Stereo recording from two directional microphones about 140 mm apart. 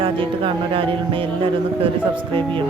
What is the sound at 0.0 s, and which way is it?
Speech, 40° right (ahead or behind).